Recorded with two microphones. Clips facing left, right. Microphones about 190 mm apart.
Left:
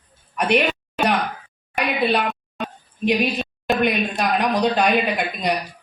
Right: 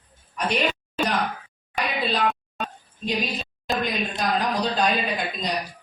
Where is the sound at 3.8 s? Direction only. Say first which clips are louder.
Left 5 dB; 65° left (ahead or behind).